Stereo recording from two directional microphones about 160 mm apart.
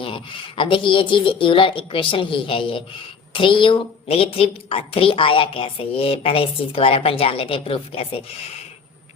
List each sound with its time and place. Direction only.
0.0 s speech: 30° left (ahead or behind)